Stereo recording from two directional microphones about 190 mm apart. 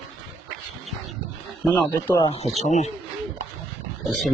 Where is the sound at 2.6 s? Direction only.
35° left (ahead or behind).